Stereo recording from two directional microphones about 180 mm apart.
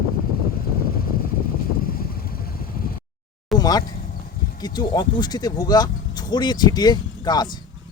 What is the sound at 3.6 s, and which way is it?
Speech, 20° left (ahead or behind).